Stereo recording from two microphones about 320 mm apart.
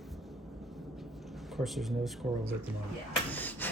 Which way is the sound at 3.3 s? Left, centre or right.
Centre.